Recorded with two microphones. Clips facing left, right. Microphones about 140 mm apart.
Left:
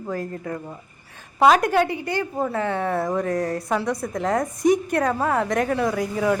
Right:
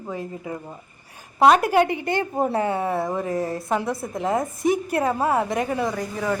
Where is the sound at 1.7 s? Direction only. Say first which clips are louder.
Right 2 dB; 20° right (ahead or behind).